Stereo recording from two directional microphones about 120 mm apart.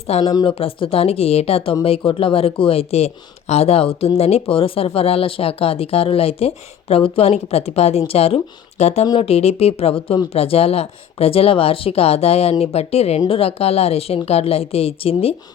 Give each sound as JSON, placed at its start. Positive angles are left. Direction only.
{"t": 0.1, "sound": "speech", "side_deg": 60}
{"t": 0.4, "sound": "speech", "side_deg": 50}